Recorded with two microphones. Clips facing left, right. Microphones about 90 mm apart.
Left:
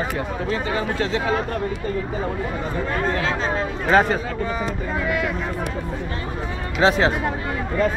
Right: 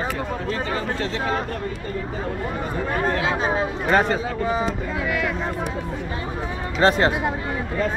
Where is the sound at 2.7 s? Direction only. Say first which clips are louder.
Right 1 dB; 5° right (ahead or behind).